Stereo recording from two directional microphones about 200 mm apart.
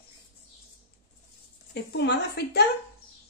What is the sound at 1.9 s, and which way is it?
Speech, 55° left (ahead or behind).